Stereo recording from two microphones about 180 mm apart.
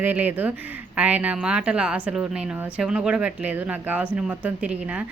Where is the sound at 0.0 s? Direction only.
10° right (ahead or behind).